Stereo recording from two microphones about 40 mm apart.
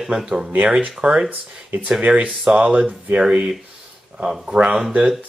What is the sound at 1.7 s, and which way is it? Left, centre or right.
Speech, right.